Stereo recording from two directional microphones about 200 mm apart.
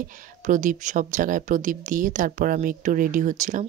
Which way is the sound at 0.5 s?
40° right (ahead or behind).